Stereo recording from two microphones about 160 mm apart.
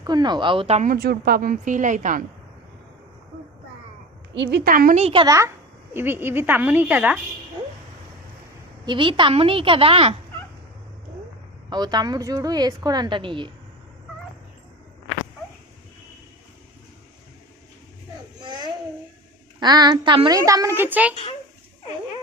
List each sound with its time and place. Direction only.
0.0 s a woman's voice: 25° right (ahead or behind)
0.9 s a woman's voice: 75° right (ahead or behind); by 2.2 s 55° right (ahead or behind)
4.4 s a woman's voice: 75° right (ahead or behind)
4.9 s a woman's voice: 40° right (ahead or behind)
5.2 s a woman's voice: 20° right (ahead or behind)
8.9 s a woman's voice: 30° right (ahead or behind)
11.7 s a woman's voice: 25° right (ahead or behind)
18.4 s a sound: 25° right (ahead or behind)
19.5 s a woman's voice: 25° right (ahead or behind); by 21.2 s 10° right (ahead or behind)